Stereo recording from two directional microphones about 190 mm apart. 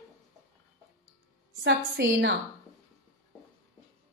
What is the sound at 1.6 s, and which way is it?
Speech, 60° right (ahead or behind).